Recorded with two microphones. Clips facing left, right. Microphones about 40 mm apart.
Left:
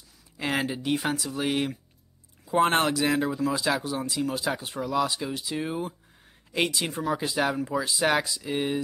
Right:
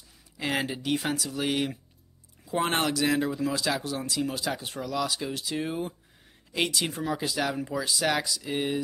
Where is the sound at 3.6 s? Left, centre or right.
Centre.